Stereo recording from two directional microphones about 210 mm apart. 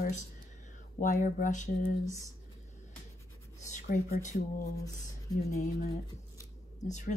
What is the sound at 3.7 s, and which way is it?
Speech, 45° left (ahead or behind).